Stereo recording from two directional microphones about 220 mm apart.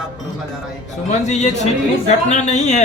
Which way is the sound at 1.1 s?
30° left (ahead or behind).